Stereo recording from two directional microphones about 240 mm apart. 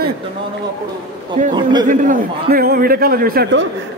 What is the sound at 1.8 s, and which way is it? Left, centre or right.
A man's voice, right.